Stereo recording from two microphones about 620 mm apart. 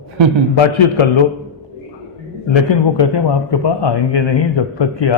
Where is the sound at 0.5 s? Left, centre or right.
Left.